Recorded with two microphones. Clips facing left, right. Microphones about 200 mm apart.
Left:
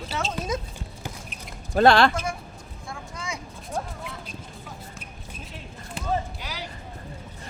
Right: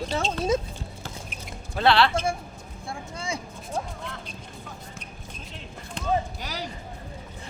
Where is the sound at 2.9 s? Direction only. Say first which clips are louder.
Right 3 dB; 30° right (ahead or behind).